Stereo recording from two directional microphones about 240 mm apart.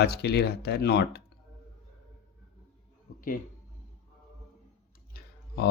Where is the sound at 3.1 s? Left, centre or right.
Left.